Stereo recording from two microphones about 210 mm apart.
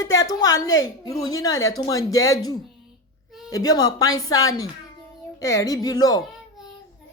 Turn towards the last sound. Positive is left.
turn(degrees=15)  # may be behind; listen again after turning